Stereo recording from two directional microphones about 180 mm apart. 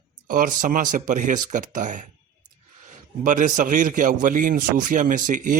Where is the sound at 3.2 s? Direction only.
45° right (ahead or behind).